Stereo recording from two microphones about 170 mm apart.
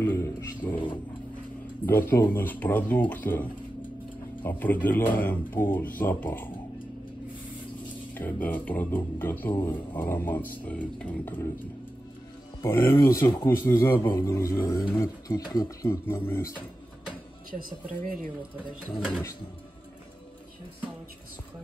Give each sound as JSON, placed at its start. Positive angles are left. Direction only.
{"t": 0.0, "sound": "a sound", "side_deg": 15}
{"t": 1.9, "sound": "a man's voice", "side_deg": 10}
{"t": 8.1, "sound": "a man's voice", "side_deg": 10}
{"t": 12.6, "sound": "a man's voice", "side_deg": 15}
{"t": 18.0, "sound": "speech", "side_deg": -55}
{"t": 18.9, "sound": "speech", "side_deg": -5}